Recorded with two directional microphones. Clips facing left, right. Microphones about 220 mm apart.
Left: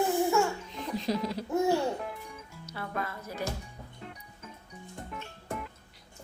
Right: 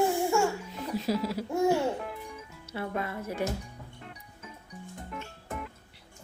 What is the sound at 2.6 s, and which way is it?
Speech, 25° right (ahead or behind).